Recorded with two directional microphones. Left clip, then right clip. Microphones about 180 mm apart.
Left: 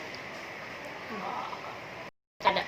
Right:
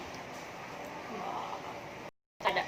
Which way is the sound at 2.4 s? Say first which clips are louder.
Left 4 dB; 25° left (ahead or behind).